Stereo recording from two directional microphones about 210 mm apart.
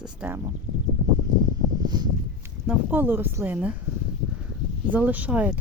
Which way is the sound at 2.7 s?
10° right (ahead or behind).